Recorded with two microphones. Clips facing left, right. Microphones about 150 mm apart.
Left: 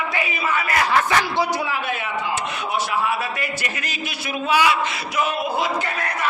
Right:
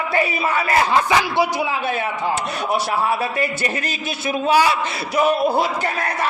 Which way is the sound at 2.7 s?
35° right (ahead or behind).